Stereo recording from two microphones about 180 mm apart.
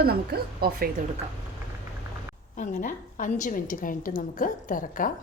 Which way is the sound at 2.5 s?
45° left (ahead or behind).